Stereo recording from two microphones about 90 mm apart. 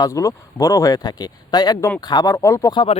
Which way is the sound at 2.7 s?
60° left (ahead or behind).